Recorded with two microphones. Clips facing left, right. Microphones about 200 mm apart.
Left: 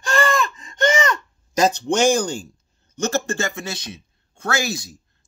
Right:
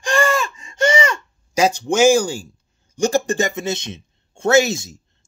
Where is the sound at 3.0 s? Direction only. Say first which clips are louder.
Right 5 dB; 15° right (ahead or behind).